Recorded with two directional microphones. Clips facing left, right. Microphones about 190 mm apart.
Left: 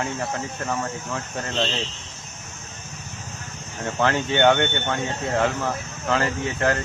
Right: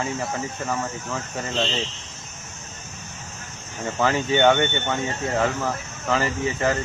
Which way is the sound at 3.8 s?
5° right (ahead or behind).